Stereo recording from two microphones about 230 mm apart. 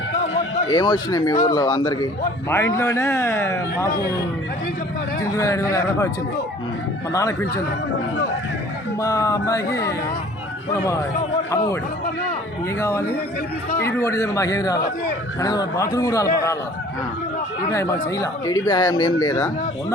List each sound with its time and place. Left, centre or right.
0.7 s speech: centre
5.2 s speech: centre
7.1 s speech: centre
9.0 s speech: centre
11.5 s speech: centre
12.8 s speech: centre
17.7 s speech: centre